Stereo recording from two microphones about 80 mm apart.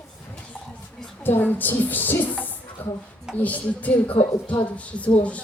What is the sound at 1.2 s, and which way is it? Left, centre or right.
A woman's voice, left.